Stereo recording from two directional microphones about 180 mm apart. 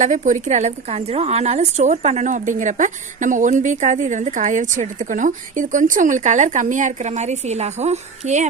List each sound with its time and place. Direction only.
0.0 s a woman's voice: 45° right (ahead or behind)